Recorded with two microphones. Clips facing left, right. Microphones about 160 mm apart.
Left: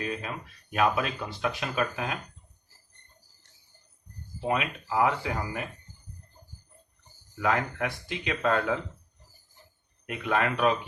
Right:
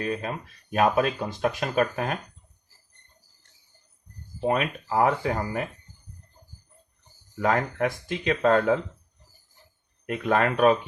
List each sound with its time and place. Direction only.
0.0 s speech: 40° right (ahead or behind)
4.4 s speech: 45° right (ahead or behind)
7.3 s speech: 45° right (ahead or behind)
10.1 s speech: 45° right (ahead or behind)